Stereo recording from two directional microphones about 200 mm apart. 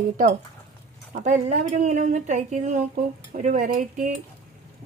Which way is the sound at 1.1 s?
35° right (ahead or behind).